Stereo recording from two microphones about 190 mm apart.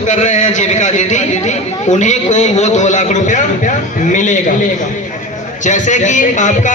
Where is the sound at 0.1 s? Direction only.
40° left (ahead or behind).